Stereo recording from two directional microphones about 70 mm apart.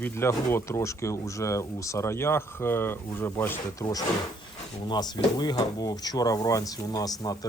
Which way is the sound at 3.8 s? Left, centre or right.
Left.